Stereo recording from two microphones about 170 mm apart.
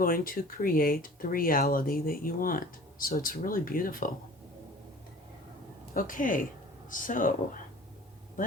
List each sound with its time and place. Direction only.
0.0 s speech: 55° left (ahead or behind)
5.9 s speech: 55° left (ahead or behind)